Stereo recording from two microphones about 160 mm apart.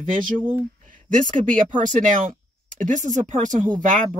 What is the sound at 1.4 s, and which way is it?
Speech, 55° right (ahead or behind).